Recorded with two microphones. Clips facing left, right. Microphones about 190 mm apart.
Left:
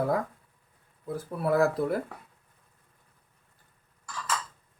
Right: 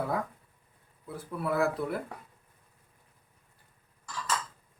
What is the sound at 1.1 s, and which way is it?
Speech, 40° left (ahead or behind).